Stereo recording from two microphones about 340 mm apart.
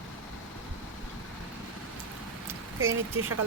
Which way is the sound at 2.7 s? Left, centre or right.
Right.